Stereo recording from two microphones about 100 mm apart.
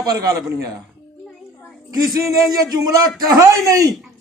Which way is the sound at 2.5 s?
40° right (ahead or behind).